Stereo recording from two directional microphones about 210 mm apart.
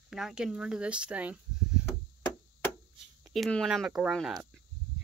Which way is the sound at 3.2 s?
Centre (ahead or behind).